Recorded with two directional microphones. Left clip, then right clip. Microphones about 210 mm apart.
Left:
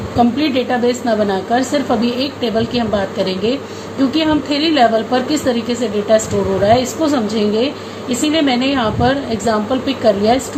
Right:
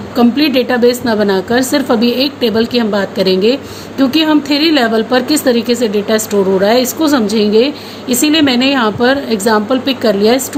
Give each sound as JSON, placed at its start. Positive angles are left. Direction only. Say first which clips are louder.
{"t": 0.2, "sound": "a woman's voice", "louder": "right 4 dB", "side_deg": -55}